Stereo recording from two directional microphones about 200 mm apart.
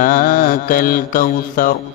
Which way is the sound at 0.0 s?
45° left (ahead or behind).